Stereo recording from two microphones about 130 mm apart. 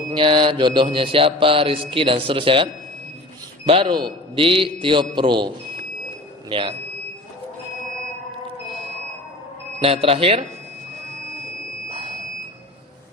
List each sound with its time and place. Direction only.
0.1 s mantra: 40° right (ahead or behind)
3.7 s mantra: 40° right (ahead or behind)
4.4 s a man's voice: 45° right (ahead or behind)
6.5 s a man's voice: 40° right (ahead or behind)
9.8 s mantra: 45° right (ahead or behind)